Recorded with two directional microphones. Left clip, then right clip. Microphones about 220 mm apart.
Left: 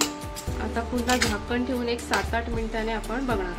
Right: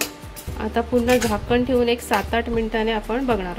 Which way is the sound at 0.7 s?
35° right (ahead or behind).